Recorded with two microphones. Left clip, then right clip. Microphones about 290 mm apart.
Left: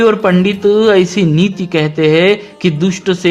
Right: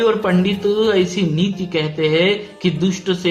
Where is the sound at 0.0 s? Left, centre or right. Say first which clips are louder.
Left 6 dB; left.